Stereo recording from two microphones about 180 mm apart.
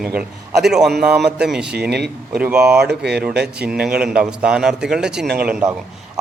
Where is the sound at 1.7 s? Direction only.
65° right (ahead or behind).